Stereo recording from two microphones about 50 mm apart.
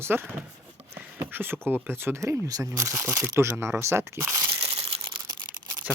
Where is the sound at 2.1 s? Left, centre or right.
Right.